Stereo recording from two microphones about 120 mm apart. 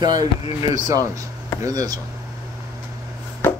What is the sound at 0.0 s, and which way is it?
Speech, 35° right (ahead or behind).